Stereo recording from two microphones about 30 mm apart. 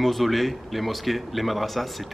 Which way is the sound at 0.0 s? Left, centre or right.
Centre.